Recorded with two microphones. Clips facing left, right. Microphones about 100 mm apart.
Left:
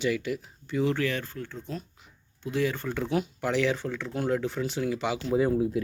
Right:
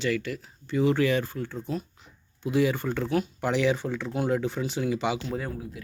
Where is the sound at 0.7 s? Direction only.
5° right (ahead or behind).